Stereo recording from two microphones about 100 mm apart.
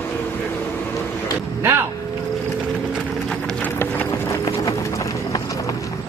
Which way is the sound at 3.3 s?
5° left (ahead or behind).